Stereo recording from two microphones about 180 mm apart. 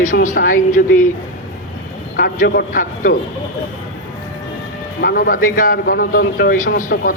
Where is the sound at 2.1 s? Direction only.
55° left (ahead or behind).